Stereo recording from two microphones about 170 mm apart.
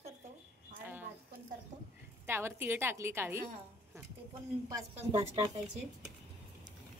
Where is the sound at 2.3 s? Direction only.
15° right (ahead or behind).